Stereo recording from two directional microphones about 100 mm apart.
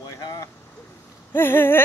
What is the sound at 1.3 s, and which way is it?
Speech, 20° left (ahead or behind).